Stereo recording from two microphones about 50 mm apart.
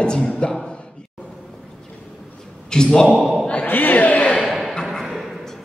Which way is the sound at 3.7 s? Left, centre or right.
Left.